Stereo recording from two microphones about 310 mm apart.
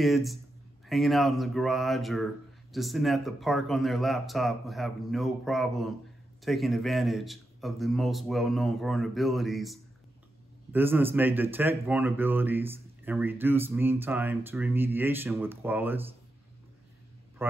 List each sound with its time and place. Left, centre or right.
0.0 s speech: centre
17.4 s a man's voice: centre